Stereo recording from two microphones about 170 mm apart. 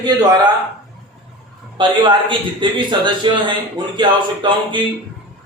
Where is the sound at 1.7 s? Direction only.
25° right (ahead or behind).